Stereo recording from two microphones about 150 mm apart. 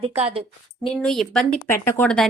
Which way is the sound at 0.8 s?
5° left (ahead or behind).